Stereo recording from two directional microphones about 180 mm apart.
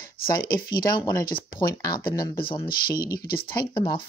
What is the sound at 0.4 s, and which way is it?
Speech, 25° left (ahead or behind).